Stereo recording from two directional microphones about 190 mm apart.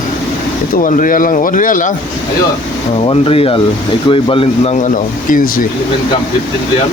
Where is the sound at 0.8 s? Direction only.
45° left (ahead or behind).